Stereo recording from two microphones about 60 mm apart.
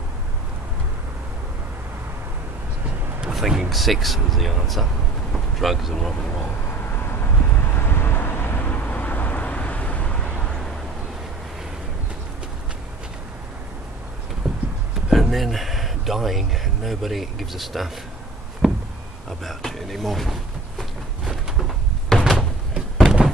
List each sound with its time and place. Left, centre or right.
3.3 s speech: centre
6.4 s vehicle: left
10.1 s vehicle: centre
14.4 s a sound: centre
15.0 s speech: centre
18.6 s a sound: centre
19.4 s speech: centre
21.3 s door: centre